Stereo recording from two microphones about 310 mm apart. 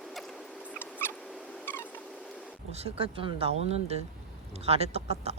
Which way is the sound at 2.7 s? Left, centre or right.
Centre.